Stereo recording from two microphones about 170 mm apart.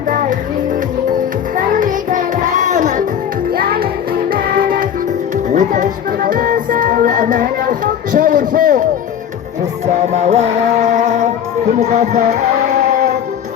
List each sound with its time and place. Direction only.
1.5 s music: 50° right (ahead or behind)
3.5 s music: 60° right (ahead or behind)
5.5 s music: 45° right (ahead or behind)
9.8 s music: 40° right (ahead or behind)